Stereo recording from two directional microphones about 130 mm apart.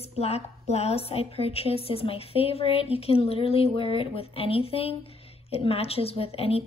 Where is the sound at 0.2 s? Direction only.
55° left (ahead or behind).